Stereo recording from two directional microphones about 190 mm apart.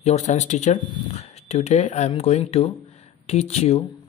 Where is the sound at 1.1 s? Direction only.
35° left (ahead or behind).